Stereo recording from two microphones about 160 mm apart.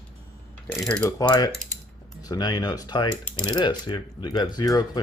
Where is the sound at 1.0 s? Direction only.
25° left (ahead or behind).